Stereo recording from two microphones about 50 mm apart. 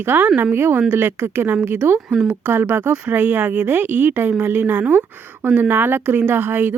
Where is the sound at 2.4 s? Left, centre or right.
Right.